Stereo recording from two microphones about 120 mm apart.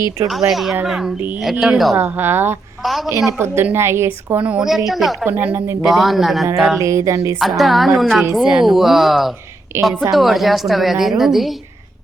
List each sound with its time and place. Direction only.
0.3 s speech: centre (ahead or behind)
2.0 s speech: 15° right (ahead or behind)
2.8 s speech: centre (ahead or behind)
3.3 s a woman's voice: 20° right (ahead or behind)
4.4 s speech: 5° right (ahead or behind)
5.2 s speech: 15° right (ahead or behind)
5.9 s speech: centre (ahead or behind)
6.7 s a woman's voice: 25° right (ahead or behind)
7.3 s speech: centre (ahead or behind)
9.7 s a woman's voice: 25° right (ahead or behind)
10.2 s speech: centre (ahead or behind)